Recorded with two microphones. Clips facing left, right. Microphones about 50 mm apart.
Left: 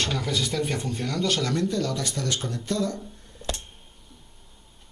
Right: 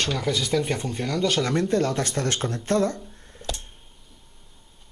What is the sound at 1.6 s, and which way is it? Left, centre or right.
Speech, right.